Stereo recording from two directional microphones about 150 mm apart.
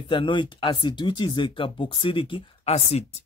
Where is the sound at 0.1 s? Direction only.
35° left (ahead or behind).